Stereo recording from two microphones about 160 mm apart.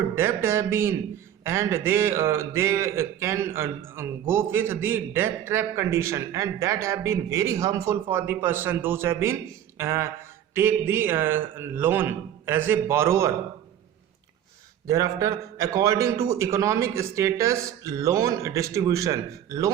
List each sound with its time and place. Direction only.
0.2 s a man's voice: 15° right (ahead or behind)
14.8 s a man's voice: 20° right (ahead or behind)